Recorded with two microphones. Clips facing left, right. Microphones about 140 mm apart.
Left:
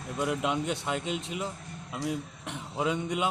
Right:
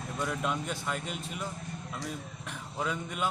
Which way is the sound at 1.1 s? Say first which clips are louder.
Left 6 dB; 80° left.